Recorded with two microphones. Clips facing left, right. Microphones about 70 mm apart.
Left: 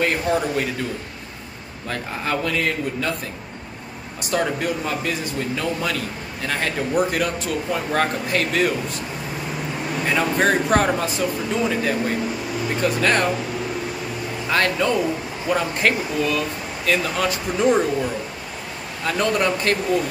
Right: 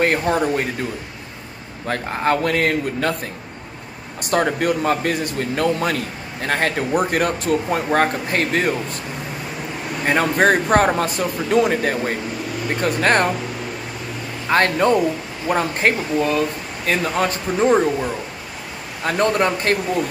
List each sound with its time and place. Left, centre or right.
0.0 s speech: right
1.9 s speech: right
4.2 s speech: right
10.0 s speech: right
14.5 s speech: right
19.0 s speech: right